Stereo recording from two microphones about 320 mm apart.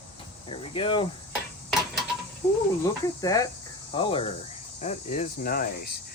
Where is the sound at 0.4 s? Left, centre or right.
Centre.